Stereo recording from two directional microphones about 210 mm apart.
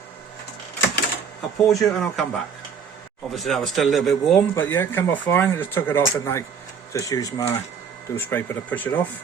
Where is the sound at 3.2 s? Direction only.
Centre (ahead or behind).